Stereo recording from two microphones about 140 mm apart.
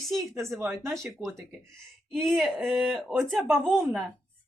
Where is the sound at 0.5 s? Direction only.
20° right (ahead or behind).